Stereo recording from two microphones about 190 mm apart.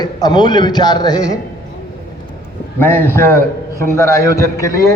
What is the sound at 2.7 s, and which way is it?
A man's voice, 10° left (ahead or behind).